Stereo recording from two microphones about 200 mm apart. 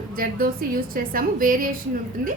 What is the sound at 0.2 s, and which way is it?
A woman's voice, 45° right (ahead or behind).